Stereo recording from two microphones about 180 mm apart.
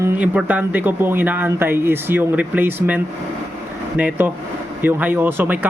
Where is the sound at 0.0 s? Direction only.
10° right (ahead or behind).